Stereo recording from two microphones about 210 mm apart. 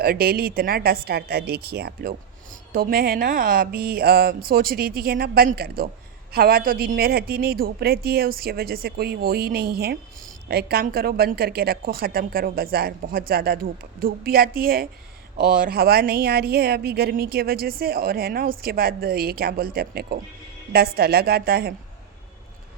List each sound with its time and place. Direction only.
0.0 s a woman's voice: 45° right (ahead or behind)